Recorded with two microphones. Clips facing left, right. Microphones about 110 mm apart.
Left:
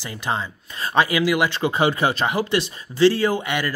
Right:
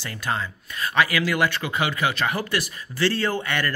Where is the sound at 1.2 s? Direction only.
15° left (ahead or behind).